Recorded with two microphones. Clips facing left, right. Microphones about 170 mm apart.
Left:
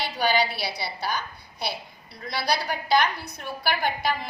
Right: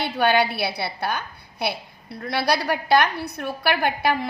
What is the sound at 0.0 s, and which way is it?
A woman's voice, 60° right (ahead or behind).